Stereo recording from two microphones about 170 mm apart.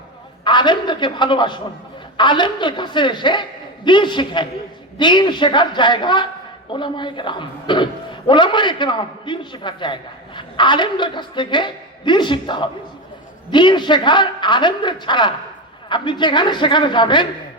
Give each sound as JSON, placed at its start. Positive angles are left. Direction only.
{"t": 0.4, "sound": "a man's voice", "side_deg": 25}